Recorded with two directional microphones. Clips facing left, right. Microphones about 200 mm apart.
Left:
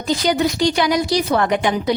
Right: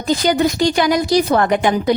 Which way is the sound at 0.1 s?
50° right (ahead or behind).